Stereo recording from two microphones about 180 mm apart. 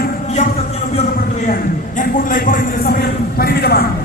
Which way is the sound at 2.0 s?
50° left (ahead or behind).